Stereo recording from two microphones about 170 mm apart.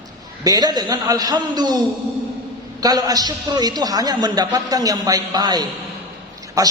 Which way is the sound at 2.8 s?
20° right (ahead or behind).